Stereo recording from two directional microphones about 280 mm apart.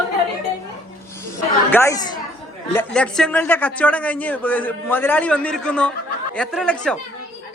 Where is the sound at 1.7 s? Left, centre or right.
Centre.